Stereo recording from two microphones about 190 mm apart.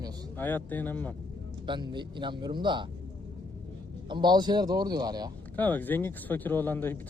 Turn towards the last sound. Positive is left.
turn(degrees=10)  # may be behind; listen again after turning